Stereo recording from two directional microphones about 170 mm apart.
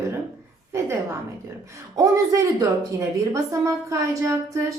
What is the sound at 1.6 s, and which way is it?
Speech, 20° right (ahead or behind).